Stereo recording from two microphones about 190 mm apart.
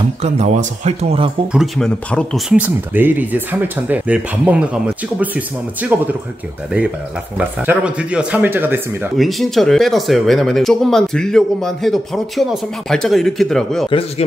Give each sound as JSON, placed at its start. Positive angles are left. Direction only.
{"t": 0.2, "sound": "speech", "side_deg": -35}
{"t": 1.5, "sound": "speech", "side_deg": 0}
{"t": 2.5, "sound": "speech", "side_deg": -10}
{"t": 7.3, "sound": "speech", "side_deg": -5}
{"t": 9.2, "sound": "speech", "side_deg": 0}
{"t": 13.8, "sound": "speech", "side_deg": 30}